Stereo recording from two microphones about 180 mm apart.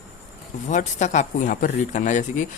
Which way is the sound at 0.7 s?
40° left (ahead or behind).